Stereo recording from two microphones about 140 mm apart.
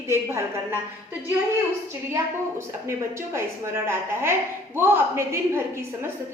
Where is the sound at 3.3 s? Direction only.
20° right (ahead or behind).